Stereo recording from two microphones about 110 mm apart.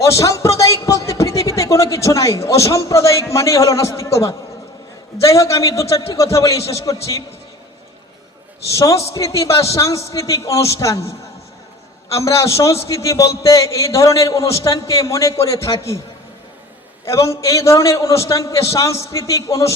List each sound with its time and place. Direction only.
0.0 s a man's voice: 25° left (ahead or behind)
8.7 s a man's voice: 25° left (ahead or behind)
17.1 s a man's voice: 25° left (ahead or behind)